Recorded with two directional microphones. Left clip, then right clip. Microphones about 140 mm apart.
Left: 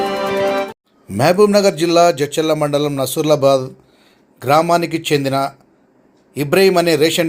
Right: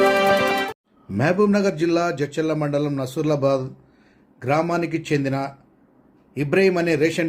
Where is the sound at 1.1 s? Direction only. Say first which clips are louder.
Left 8 dB; 15° left (ahead or behind).